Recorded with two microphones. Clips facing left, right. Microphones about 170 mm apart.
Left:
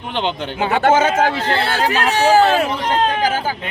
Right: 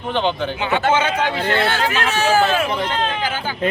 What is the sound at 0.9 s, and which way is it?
Speech, 45° left (ahead or behind).